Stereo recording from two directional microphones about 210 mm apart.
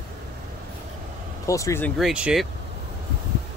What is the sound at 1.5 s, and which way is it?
Speech, 15° left (ahead or behind).